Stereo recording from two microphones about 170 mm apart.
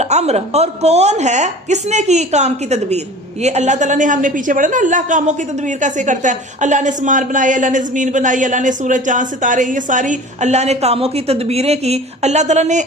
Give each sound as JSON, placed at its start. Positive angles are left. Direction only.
{"t": 0.0, "sound": "a woman's voice", "side_deg": -40}